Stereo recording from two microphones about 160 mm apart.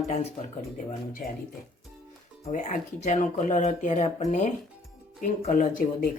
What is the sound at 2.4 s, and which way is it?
Speech, 50° left (ahead or behind).